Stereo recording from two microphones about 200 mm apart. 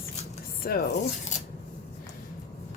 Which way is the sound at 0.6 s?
45° left (ahead or behind).